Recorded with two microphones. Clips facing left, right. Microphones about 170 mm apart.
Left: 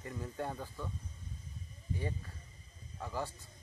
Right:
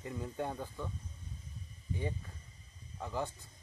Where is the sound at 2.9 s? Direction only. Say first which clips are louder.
Right 2 dB; 15° right (ahead or behind).